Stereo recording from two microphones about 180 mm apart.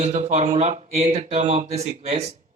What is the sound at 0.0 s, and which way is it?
Speech, 40° right (ahead or behind).